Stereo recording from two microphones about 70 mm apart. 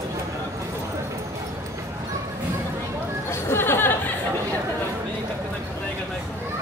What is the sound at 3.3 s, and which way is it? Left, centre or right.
Chatter, left.